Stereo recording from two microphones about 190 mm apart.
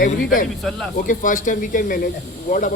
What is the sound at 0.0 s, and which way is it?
Speech, 45° left (ahead or behind).